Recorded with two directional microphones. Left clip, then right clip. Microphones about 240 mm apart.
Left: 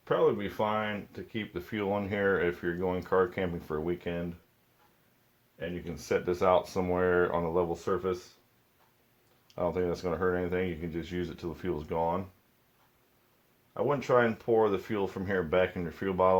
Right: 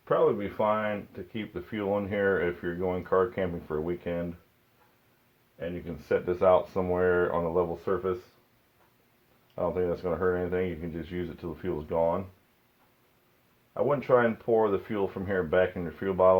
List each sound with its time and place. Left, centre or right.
0.0 s speech: left
6.1 s speech: left
9.6 s speech: left
13.7 s speech: left